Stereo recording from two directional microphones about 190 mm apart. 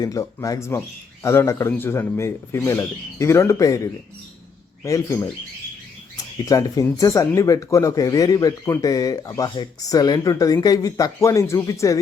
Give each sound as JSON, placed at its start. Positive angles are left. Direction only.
{"t": 0.0, "sound": "speech", "side_deg": 15}
{"t": 6.4, "sound": "speech", "side_deg": 20}